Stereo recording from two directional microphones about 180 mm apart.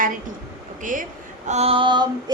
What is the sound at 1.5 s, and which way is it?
Female singing, 35° right (ahead or behind).